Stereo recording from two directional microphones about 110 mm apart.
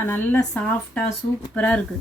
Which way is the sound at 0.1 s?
15° left (ahead or behind).